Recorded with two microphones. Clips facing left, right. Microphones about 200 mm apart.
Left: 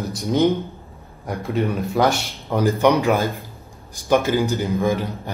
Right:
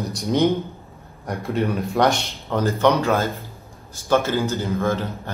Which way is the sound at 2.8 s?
15° left (ahead or behind).